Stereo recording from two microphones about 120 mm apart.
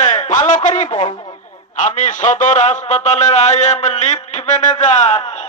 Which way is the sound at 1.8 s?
90° left.